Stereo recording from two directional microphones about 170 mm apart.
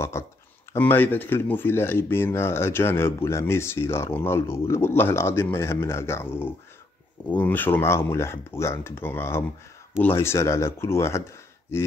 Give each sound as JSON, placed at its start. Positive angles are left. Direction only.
{"t": 0.2, "sound": "speech", "side_deg": 15}